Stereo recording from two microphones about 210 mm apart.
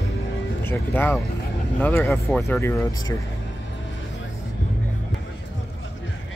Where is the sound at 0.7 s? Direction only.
10° left (ahead or behind).